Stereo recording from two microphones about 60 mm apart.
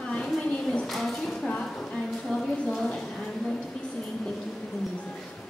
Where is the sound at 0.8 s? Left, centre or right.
Centre.